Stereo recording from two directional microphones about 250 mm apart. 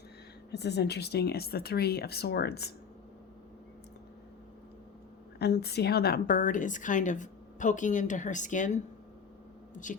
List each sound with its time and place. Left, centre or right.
0.5 s a woman's voice: left
5.4 s a woman's voice: left